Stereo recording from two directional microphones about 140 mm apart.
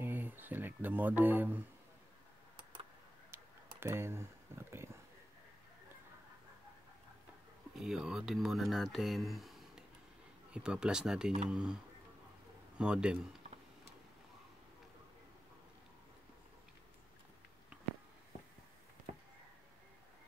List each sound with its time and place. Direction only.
0.0 s a sound: 15° right (ahead or behind)
3.8 s speech: 20° right (ahead or behind)
7.8 s speech: 5° right (ahead or behind)